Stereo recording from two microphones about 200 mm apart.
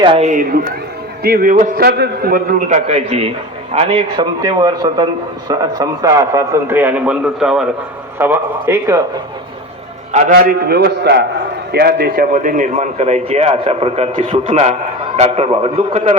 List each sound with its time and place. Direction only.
0.0 s a man's voice: 25° right (ahead or behind)
0.3 s a man's voice: 40° right (ahead or behind); by 9.0 s 10° right (ahead or behind)
10.1 s a man's voice: 40° right (ahead or behind)